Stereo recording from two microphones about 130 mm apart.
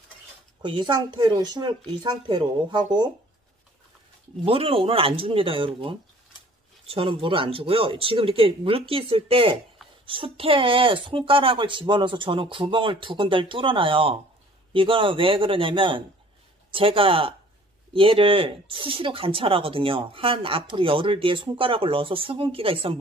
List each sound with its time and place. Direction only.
0.6 s speech: 35° right (ahead or behind)
4.5 s speech: 45° right (ahead or behind)